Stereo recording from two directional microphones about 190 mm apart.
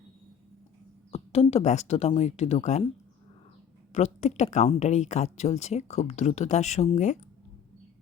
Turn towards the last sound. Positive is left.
turn(degrees=35)  # may be behind; listen again after turning